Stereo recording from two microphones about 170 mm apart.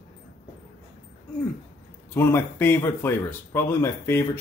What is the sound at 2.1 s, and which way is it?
Speech, 15° left (ahead or behind).